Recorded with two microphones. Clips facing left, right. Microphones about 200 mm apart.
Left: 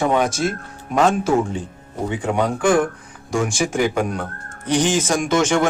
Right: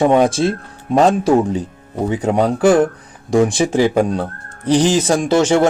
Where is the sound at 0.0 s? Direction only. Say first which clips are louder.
Right 6 dB; 30° right (ahead or behind).